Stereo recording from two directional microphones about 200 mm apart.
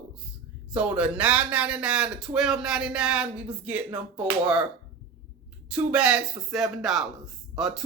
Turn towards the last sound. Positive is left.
turn(degrees=0)  # may be behind; listen again after turning